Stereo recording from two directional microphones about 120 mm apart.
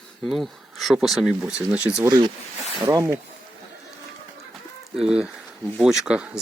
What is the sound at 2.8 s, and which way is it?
Speech, 25° right (ahead or behind).